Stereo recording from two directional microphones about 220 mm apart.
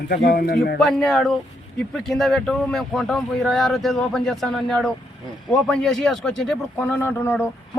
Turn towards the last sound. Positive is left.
turn(degrees=10)  # may be behind; listen again after turning